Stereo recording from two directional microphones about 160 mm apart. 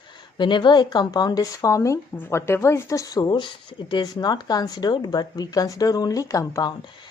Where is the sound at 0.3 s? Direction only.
30° left (ahead or behind).